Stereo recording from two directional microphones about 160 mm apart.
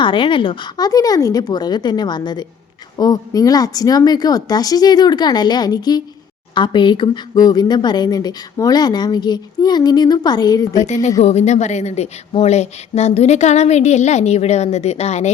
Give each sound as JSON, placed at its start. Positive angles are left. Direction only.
{"t": 0.0, "sound": "speech", "side_deg": 30}
{"t": 10.8, "sound": "a woman's voice", "side_deg": 45}